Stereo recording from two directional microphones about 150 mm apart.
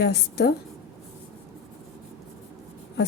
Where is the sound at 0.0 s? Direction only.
90° left.